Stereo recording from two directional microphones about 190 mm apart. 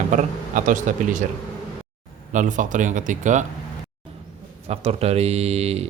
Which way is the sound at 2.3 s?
40° right (ahead or behind).